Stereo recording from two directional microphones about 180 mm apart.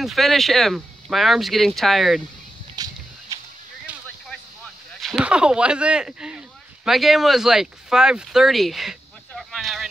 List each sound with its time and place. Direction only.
0.0 s speech: centre (ahead or behind)
2.7 s a sound: 20° right (ahead or behind)
5.0 s speech: 5° right (ahead or behind)